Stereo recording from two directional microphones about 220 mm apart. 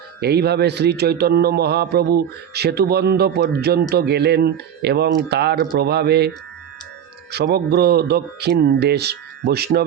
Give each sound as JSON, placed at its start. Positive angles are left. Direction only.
{"t": 0.2, "sound": "a man's voice", "side_deg": -45}